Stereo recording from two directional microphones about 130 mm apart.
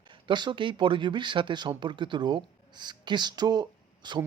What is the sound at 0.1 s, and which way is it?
Speech, 35° right (ahead or behind).